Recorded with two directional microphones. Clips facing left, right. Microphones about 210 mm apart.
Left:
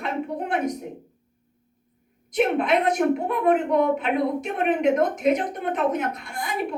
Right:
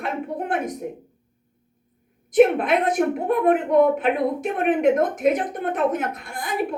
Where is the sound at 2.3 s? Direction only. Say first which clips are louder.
Right 5 dB; 50° right (ahead or behind).